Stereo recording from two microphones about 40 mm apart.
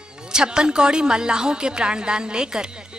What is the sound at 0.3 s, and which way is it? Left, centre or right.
Music, centre.